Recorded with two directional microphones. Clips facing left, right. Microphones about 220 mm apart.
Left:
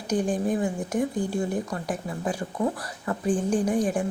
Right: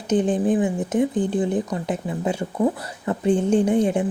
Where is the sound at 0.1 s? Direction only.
20° right (ahead or behind).